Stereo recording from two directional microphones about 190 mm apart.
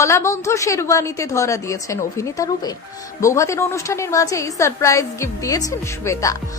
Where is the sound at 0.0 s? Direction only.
15° left (ahead or behind).